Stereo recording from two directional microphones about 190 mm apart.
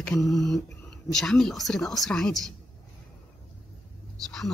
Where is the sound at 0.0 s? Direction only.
5° left (ahead or behind).